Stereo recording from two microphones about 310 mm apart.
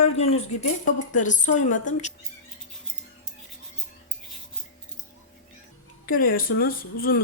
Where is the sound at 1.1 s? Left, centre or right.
Left.